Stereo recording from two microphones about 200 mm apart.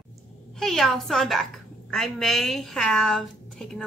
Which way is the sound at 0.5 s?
Centre (ahead or behind).